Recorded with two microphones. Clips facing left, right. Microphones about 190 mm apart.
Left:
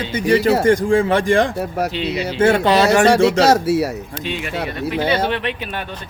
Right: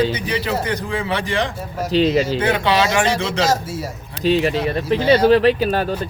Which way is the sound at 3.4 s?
70° left (ahead or behind).